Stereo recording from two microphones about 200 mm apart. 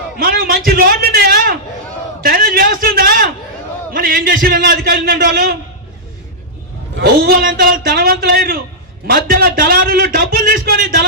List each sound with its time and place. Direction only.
0.2 s a man's voice: 45° right (ahead or behind)
2.2 s a sound: 45° right (ahead or behind)
3.9 s a man's voice: 45° right (ahead or behind)
7.0 s a man's voice: 45° right (ahead or behind)